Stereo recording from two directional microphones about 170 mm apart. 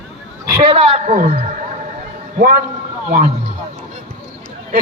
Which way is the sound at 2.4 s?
55° right (ahead or behind).